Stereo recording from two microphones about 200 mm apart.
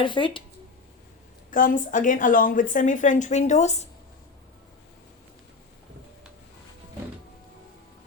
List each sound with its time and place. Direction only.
0.0 s speech: 25° left (ahead or behind)
1.5 s a woman's voice: 45° left (ahead or behind)